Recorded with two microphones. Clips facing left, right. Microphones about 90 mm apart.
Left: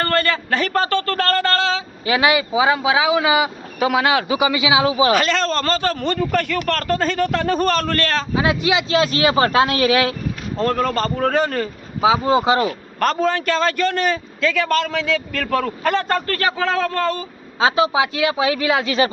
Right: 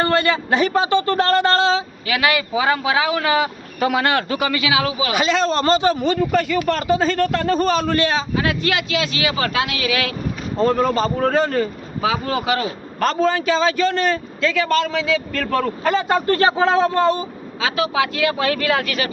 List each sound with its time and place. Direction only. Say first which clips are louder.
0.0 s speech: right 2 dB; 15° right (ahead or behind)
2.0 s speech: left 3 dB; 30° left (ahead or behind)
2.3 s speech: left 2 dB; 15° left (ahead or behind)
5.1 s speech: even; 10° right (ahead or behind)
8.4 s speech: left 5 dB; 15° left (ahead or behind)
8.9 s speech: left 5 dB; 35° left (ahead or behind)
10.6 s a man's voice: right 2 dB; 5° right (ahead or behind)
12.0 s speech: left 6 dB; 15° left (ahead or behind)
12.4 s speech: left 4 dB; 25° left (ahead or behind)
13.0 s a man's voice: right 1 dB; centre (ahead or behind)
16.1 s speech: right 4 dB; 25° right (ahead or behind)
17.6 s speech: left 3 dB; 25° left (ahead or behind)